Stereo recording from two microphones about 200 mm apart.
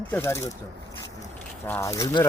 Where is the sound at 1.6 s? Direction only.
10° left (ahead or behind).